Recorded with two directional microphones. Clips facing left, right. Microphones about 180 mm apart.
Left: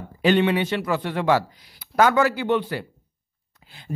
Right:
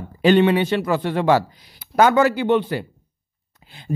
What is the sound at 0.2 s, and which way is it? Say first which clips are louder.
A man's voice: right 4 dB; 35° right (ahead or behind).